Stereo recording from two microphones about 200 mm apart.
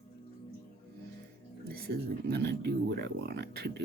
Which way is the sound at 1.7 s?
50° right (ahead or behind).